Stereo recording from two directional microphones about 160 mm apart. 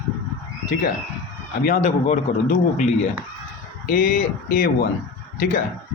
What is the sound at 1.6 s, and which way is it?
A man's voice, 50° left (ahead or behind).